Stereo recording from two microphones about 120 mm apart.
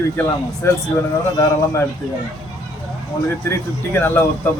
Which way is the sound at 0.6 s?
20° left (ahead or behind).